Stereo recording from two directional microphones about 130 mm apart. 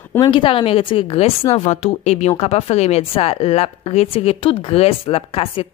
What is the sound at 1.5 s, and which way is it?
Speech, 60° left (ahead or behind).